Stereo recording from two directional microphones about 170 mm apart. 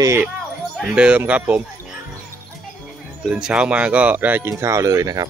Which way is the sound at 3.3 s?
5° right (ahead or behind).